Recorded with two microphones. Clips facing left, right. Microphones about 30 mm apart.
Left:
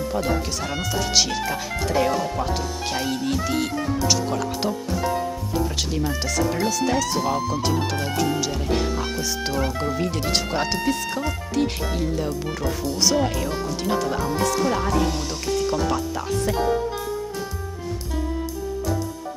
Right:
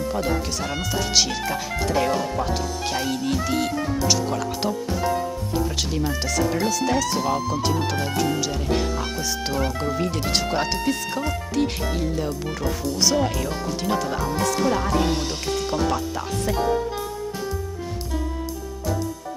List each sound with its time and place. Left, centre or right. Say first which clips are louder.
0.1 s speech: left 2 dB; centre
15.4 s speech: left 6 dB; centre
15.8 s speech: even; centre